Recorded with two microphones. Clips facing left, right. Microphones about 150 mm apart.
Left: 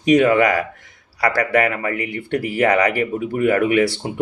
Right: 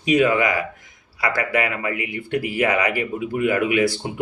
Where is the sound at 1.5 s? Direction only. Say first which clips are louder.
Left 4 dB; 40° left (ahead or behind).